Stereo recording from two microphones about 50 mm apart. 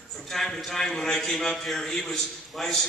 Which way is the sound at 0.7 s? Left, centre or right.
Centre.